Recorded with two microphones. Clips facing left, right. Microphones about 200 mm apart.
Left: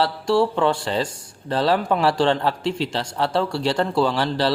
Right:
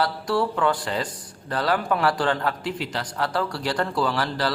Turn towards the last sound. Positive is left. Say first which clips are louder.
# left 4 dB
turn(degrees=25)  # may be behind; listen again after turning